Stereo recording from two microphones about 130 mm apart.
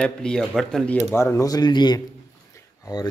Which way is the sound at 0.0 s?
5° left (ahead or behind).